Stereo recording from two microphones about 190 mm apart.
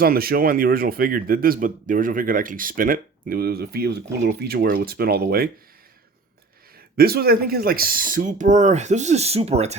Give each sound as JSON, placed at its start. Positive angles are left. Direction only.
{"t": 0.0, "sound": "a man's voice", "side_deg": -50}
{"t": 6.9, "sound": "speech", "side_deg": -55}